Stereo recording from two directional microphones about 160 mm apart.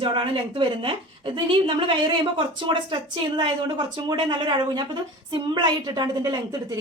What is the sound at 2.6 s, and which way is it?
A woman's voice, 30° right (ahead or behind).